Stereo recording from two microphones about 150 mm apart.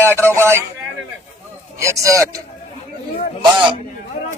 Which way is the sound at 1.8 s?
20° right (ahead or behind).